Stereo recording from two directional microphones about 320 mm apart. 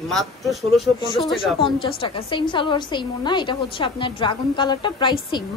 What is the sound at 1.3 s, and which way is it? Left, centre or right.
A woman's voice, centre.